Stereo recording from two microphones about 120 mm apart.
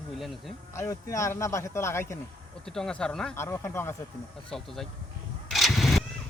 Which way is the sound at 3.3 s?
20° left (ahead or behind).